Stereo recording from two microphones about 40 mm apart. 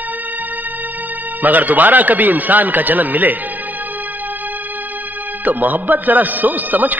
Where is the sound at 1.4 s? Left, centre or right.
Right.